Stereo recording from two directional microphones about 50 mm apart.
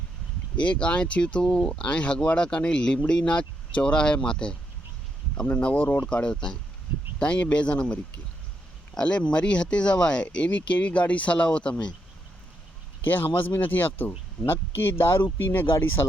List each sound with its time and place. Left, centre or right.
0.7 s speech: left
5.5 s speech: left
6.2 s speech: centre
9.0 s speech: left
13.1 s speech: left